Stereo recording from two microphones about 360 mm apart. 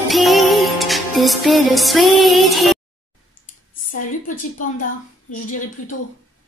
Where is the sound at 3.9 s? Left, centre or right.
Left.